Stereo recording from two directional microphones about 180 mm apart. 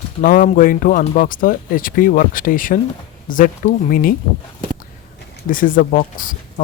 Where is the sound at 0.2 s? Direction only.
50° left (ahead or behind).